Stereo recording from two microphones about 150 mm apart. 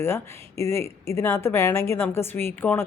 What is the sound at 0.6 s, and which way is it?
A woman's voice, 20° left (ahead or behind).